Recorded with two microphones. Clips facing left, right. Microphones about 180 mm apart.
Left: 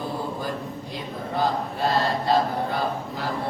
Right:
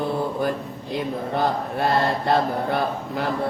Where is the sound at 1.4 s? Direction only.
60° right (ahead or behind).